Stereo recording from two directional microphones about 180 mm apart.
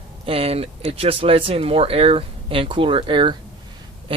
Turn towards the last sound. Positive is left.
turn(degrees=-30)  # may be behind; listen again after turning